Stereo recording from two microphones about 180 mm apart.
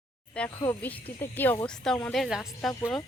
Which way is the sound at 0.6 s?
10° left (ahead or behind).